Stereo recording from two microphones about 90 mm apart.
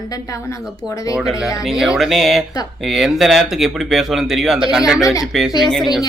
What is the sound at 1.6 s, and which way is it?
Speech, 5° right (ahead or behind).